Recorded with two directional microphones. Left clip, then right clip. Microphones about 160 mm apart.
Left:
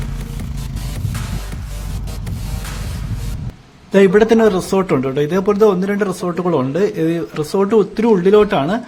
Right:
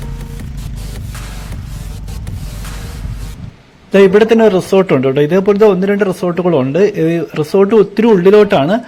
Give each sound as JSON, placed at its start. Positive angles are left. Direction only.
{"t": 3.9, "sound": "a man's voice", "side_deg": -20}